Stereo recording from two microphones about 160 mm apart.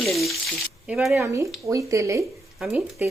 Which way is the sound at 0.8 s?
5° right (ahead or behind).